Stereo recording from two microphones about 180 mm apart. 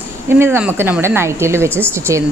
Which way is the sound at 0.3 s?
15° right (ahead or behind).